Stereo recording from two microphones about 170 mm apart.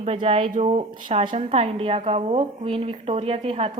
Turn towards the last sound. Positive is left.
turn(degrees=-35)  # may be behind; listen again after turning